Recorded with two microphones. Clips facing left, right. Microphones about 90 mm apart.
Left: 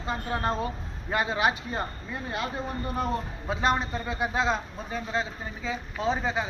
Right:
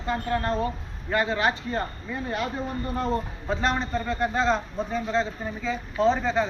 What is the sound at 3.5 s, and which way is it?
A man's voice, 5° left (ahead or behind).